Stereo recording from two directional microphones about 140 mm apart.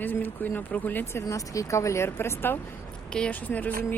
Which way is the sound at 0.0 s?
10° left (ahead or behind).